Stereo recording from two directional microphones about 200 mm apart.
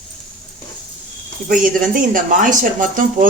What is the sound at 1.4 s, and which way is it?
Speech, 45° right (ahead or behind).